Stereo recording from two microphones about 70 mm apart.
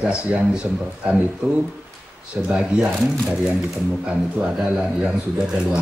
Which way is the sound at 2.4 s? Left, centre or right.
Centre.